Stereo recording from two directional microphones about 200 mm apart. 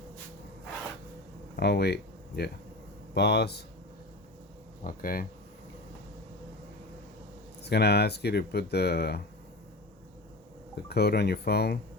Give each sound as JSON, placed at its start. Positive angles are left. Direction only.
{"t": 1.5, "sound": "speech", "side_deg": 55}
{"t": 4.8, "sound": "speech", "side_deg": 45}
{"t": 7.6, "sound": "speech", "side_deg": 55}
{"t": 10.8, "sound": "speech", "side_deg": 55}